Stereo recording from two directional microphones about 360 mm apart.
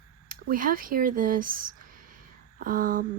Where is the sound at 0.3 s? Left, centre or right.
Right.